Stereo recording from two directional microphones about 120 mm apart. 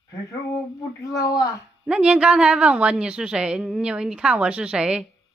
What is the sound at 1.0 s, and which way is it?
Speech, 25° left (ahead or behind).